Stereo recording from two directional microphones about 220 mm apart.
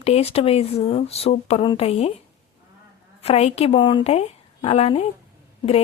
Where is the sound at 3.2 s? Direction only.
30° left (ahead or behind).